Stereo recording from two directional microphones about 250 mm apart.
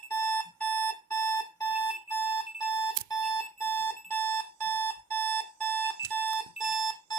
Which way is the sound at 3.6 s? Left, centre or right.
Centre.